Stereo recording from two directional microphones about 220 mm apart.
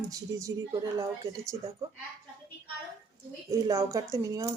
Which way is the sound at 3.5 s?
15° right (ahead or behind).